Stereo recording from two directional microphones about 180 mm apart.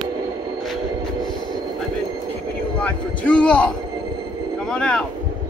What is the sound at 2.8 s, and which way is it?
Speech, 5° left (ahead or behind).